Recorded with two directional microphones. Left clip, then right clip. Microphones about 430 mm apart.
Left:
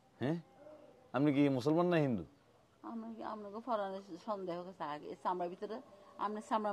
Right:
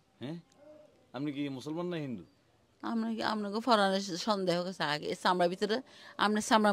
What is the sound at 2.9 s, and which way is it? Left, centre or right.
A woman's voice, right.